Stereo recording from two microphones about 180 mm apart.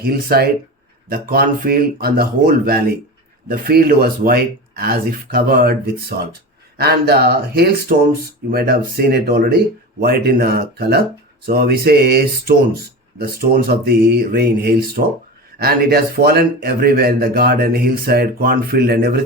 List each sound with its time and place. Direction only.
0.0 s a man's voice: 55° right (ahead or behind)